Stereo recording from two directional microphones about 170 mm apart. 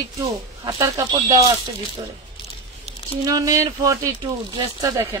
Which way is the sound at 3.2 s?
20° right (ahead or behind).